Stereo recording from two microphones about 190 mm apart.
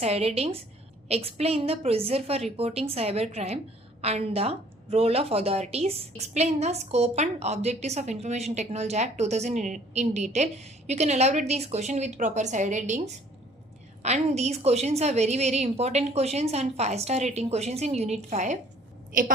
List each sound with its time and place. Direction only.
0.0 s a woman's voice: 35° right (ahead or behind)